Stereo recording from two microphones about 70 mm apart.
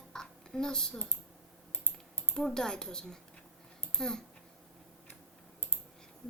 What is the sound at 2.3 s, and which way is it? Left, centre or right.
Speech, centre.